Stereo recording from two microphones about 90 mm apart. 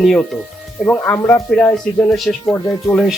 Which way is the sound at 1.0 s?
30° left (ahead or behind).